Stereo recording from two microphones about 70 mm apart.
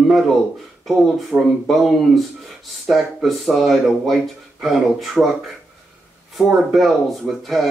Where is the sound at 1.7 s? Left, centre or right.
Centre.